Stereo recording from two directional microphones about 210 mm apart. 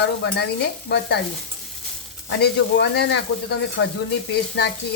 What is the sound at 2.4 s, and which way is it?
Speech, 50° left (ahead or behind).